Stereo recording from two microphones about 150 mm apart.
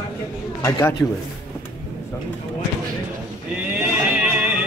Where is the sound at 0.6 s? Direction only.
20° left (ahead or behind).